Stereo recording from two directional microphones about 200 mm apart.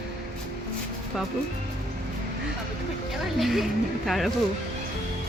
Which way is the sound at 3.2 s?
Centre (ahead or behind).